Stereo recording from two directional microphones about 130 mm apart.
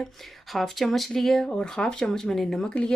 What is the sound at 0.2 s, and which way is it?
Speech, centre (ahead or behind).